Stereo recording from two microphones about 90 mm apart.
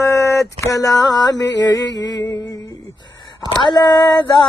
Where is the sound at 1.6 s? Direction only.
45° left (ahead or behind).